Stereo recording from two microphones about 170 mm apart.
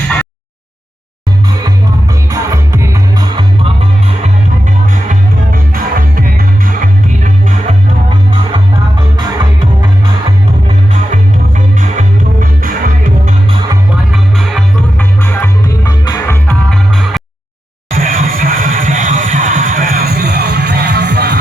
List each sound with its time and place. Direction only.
2.3 s music: 20° right (ahead or behind)
5.0 s music: 55° right (ahead or behind)
8.5 s music: 25° right (ahead or behind)
11.1 s music: 45° right (ahead or behind)
14.1 s music: centre (ahead or behind)
14.9 s music: 15° left (ahead or behind)
16.5 s music: 5° left (ahead or behind)
17.9 s music: 55° right (ahead or behind); by 21.3 s 75° right (ahead or behind)